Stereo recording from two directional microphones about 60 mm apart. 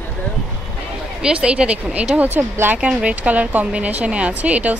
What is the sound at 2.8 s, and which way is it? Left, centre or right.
Speech, centre.